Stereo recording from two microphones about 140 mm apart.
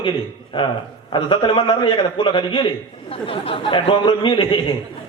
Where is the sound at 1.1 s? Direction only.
35° left (ahead or behind).